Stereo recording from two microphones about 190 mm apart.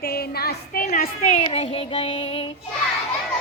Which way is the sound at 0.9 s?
40° left (ahead or behind).